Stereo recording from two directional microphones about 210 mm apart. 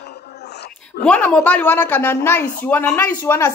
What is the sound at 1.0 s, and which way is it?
Speech, 5° left (ahead or behind).